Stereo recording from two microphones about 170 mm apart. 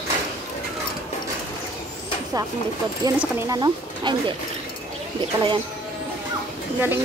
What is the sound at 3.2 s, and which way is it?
Speech, 15° right (ahead or behind).